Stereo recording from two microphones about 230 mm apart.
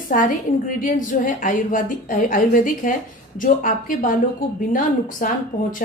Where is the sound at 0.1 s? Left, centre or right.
Left.